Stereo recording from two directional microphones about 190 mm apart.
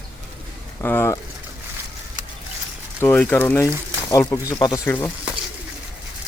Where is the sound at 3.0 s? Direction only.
10° left (ahead or behind).